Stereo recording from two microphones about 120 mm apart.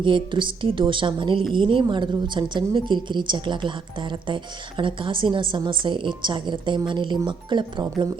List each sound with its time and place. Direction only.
0.0 s a woman's voice: 40° right (ahead or behind)